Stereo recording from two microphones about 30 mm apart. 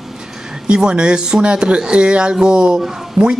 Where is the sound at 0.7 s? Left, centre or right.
Right.